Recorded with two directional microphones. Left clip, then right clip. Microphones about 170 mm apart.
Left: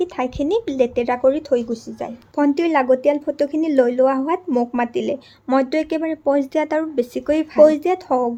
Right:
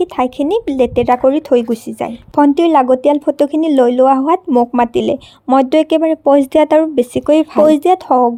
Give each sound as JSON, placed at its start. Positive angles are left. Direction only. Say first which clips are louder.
{"t": 0.0, "sound": "speech", "louder": "right 7 dB", "side_deg": -35}